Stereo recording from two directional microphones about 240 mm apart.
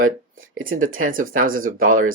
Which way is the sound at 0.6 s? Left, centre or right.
Right.